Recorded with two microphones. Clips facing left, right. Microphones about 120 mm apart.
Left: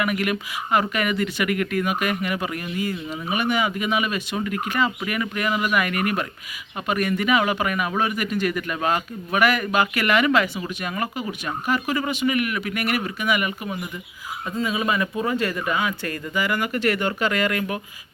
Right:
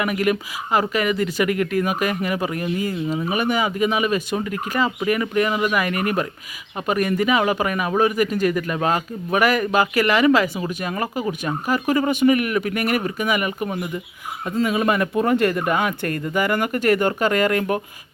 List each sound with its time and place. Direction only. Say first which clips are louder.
0.0 s speech: right 3 dB; 30° right (ahead or behind)
14.6 s speech: right 4 dB; 55° right (ahead or behind)